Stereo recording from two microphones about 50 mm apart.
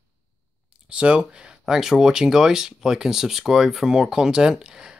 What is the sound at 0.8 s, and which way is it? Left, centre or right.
Speech, right.